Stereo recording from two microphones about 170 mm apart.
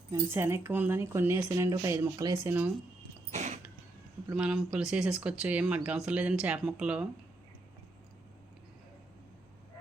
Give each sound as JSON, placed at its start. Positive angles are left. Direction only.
{"t": 0.1, "sound": "speech", "side_deg": -15}
{"t": 3.3, "sound": "a sound", "side_deg": -45}
{"t": 4.3, "sound": "speech", "side_deg": -5}